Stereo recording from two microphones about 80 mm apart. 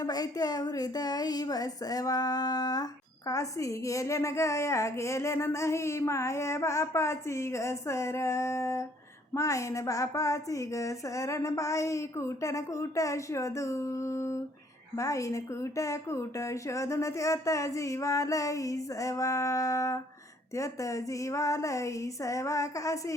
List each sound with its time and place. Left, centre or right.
0.0 s a woman's voice: left
3.2 s a woman's voice: left